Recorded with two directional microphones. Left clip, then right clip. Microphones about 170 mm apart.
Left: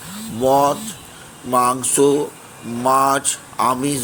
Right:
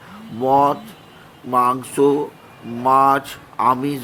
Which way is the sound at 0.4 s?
5° left (ahead or behind).